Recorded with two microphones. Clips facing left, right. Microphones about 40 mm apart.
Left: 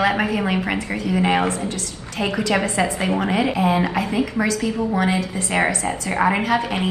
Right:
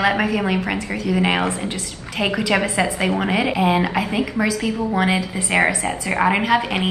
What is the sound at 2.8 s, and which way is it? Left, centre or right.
Speech, right.